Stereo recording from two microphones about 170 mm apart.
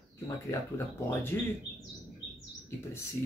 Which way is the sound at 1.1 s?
15° left (ahead or behind).